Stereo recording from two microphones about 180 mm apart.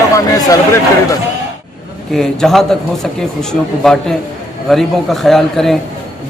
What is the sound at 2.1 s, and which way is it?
A man's voice, centre (ahead or behind).